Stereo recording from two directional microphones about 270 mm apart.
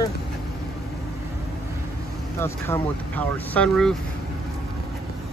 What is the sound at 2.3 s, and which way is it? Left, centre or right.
Speech, centre.